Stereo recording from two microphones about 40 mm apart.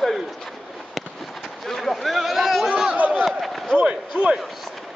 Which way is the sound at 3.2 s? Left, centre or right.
Centre.